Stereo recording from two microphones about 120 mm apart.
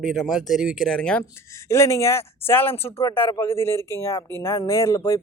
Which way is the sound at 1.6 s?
25° left (ahead or behind).